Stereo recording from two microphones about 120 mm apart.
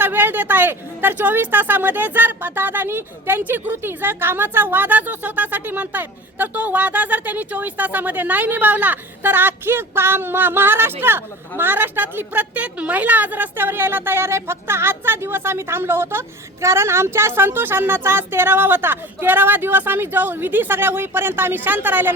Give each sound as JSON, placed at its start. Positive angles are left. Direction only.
{"t": 0.0, "sound": "speech", "side_deg": -15}